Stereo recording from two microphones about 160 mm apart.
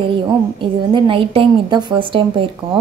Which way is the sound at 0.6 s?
30° right (ahead or behind).